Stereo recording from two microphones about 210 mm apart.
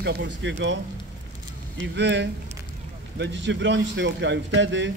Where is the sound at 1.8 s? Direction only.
55° right (ahead or behind).